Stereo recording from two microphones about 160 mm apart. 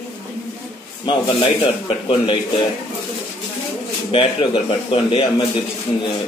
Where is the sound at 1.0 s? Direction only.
30° left (ahead or behind).